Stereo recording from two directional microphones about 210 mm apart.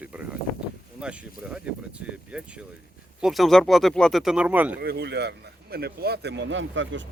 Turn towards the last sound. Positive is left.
turn(degrees=-60)  # may be behind; listen again after turning